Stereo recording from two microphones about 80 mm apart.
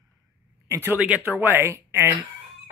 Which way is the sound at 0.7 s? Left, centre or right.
Right.